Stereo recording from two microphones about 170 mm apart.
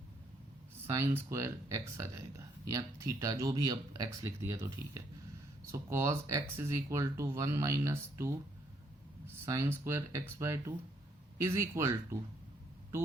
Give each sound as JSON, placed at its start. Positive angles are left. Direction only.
{"t": 0.9, "sound": "speech", "side_deg": -15}